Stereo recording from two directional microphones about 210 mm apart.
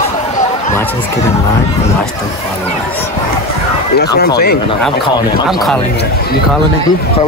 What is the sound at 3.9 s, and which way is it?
Speech, 50° left (ahead or behind).